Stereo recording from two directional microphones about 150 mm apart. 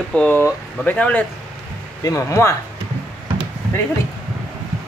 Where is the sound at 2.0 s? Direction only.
20° left (ahead or behind).